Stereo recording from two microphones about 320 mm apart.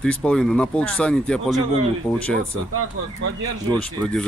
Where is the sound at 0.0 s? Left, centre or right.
Centre.